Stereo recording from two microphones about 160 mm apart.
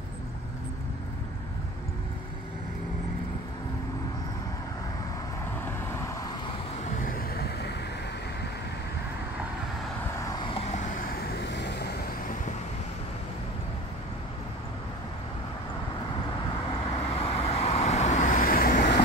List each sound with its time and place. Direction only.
5.7 s vehicle: 15° left (ahead or behind)
7.0 s vehicle: 65° left (ahead or behind); by 7.7 s 85° left
10.2 s vehicle: 30° left (ahead or behind)
11.4 s vehicle: 90° left
17.1 s vehicle: 40° left (ahead or behind); by 18.9 s 60° left (ahead or behind)